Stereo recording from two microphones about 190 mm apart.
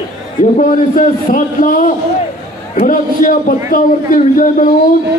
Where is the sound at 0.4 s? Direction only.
40° left (ahead or behind).